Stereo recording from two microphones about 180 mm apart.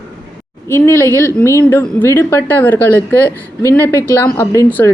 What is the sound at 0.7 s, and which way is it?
A woman's voice, 15° left (ahead or behind).